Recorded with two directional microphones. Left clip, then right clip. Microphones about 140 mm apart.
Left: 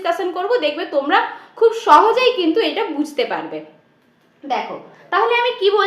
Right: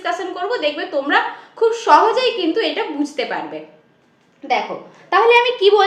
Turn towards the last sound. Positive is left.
turn(degrees=-40)  # may be behind; listen again after turning